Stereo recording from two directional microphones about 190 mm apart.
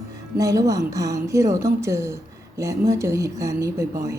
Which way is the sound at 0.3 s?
15° right (ahead or behind).